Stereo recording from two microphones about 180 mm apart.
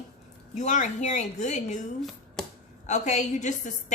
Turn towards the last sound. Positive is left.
turn(degrees=40)  # may be behind; listen again after turning